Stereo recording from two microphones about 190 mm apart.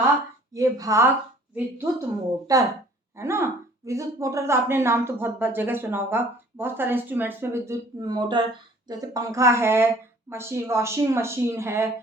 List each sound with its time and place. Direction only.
0.5 s speech: 15° right (ahead or behind)